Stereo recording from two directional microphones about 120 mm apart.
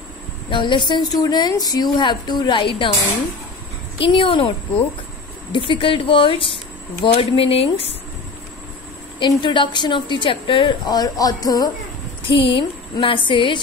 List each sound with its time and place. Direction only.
0.5 s a woman's voice: 40° left (ahead or behind)
4.0 s speech: 45° left (ahead or behind)
5.5 s speech: 45° left (ahead or behind)
9.2 s a woman's voice: 40° left (ahead or behind)
12.2 s a woman's voice: 45° left (ahead or behind)